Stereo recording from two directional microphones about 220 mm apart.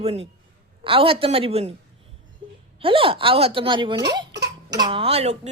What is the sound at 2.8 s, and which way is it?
Speech, 25° right (ahead or behind).